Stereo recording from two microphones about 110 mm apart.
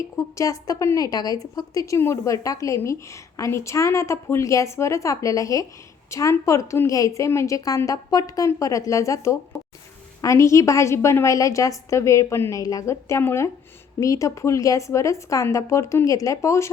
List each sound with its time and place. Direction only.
0.0 s a woman's voice: 30° left (ahead or behind)